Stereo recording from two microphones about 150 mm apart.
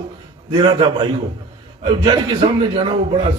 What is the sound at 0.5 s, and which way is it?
A man's voice, 35° right (ahead or behind).